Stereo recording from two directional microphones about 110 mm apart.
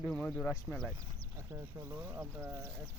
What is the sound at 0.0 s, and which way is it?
Speech, 10° left (ahead or behind).